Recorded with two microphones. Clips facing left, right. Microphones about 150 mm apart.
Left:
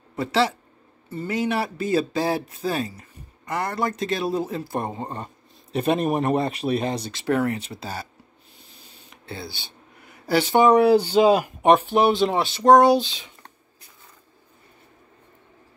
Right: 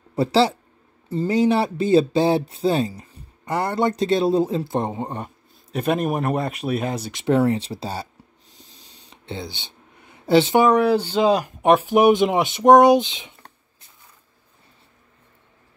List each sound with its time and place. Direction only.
0.1 s speech: 35° right (ahead or behind); by 5.3 s 15° right (ahead or behind)
5.7 s speech: centre (ahead or behind)
7.1 s speech: 20° right (ahead or behind)
7.3 s speech: 30° right (ahead or behind)
9.1 s a sound: 20° right (ahead or behind)
10.7 s speech: 10° left (ahead or behind); by 13.3 s 20° right (ahead or behind)